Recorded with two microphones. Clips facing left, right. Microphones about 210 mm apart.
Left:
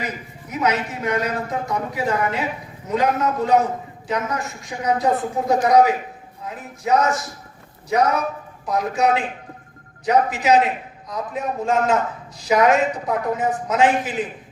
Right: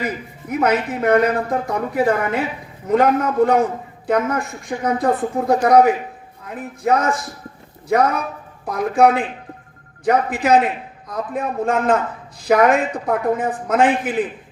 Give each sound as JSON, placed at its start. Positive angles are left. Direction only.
{"t": 0.5, "sound": "speech", "side_deg": -55}